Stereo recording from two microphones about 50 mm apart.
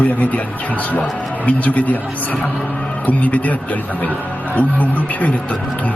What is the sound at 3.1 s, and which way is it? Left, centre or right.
Speech, left.